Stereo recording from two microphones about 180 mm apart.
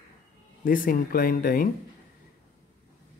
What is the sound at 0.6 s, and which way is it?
Speech, 50° left (ahead or behind).